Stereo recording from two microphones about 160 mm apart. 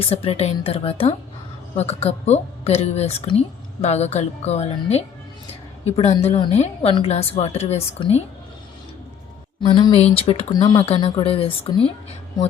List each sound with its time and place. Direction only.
0.1 s a woman's voice: 40° left (ahead or behind)
6.5 s a woman's voice: 45° left (ahead or behind)
9.6 s a woman's voice: 30° left (ahead or behind)